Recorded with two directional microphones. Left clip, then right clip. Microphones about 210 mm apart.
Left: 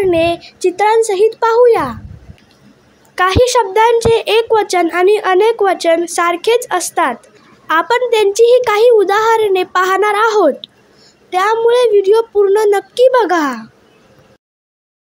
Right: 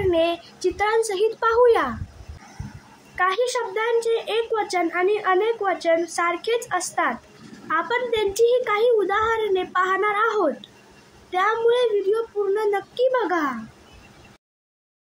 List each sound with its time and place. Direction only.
0.1 s a child's voice: 35° left (ahead or behind)
3.2 s a woman's voice: 45° left (ahead or behind)